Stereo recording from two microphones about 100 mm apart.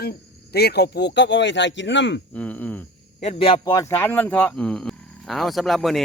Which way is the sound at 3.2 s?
75° left (ahead or behind).